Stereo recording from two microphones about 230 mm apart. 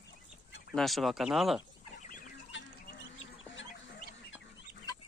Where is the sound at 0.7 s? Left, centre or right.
Centre.